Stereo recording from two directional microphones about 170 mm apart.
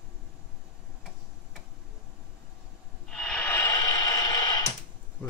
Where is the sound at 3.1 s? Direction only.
5° left (ahead or behind); by 4.7 s 20° left (ahead or behind).